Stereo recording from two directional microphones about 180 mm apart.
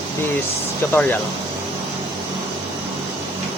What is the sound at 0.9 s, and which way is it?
Speech, 10° left (ahead or behind).